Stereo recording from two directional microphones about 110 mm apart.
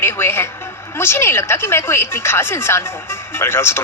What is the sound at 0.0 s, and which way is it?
A man's voice, 20° left (ahead or behind).